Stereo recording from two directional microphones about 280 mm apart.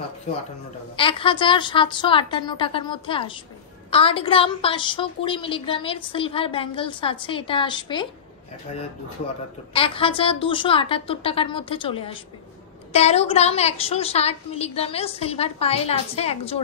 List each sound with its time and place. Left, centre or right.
0.9 s a woman's voice: centre
9.8 s a woman's voice: centre